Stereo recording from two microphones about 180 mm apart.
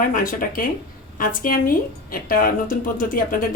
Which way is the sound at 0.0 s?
50° left (ahead or behind).